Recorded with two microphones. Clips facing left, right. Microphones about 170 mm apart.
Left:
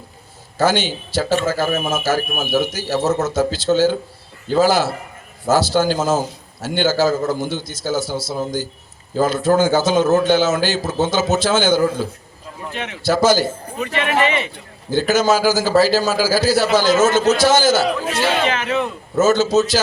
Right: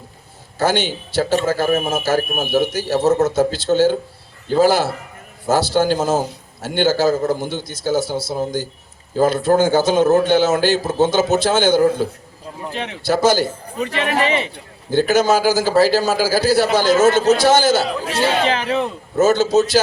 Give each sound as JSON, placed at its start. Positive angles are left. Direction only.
{"t": 0.6, "sound": "a man's voice", "side_deg": -55}
{"t": 12.6, "sound": "a man's voice", "side_deg": -30}
{"t": 13.0, "sound": "a man's voice", "side_deg": -60}
{"t": 13.7, "sound": "a man's voice", "side_deg": -35}
{"t": 14.9, "sound": "a man's voice", "side_deg": -60}
{"t": 18.1, "sound": "a man's voice", "side_deg": -30}
{"t": 19.2, "sound": "a man's voice", "side_deg": -60}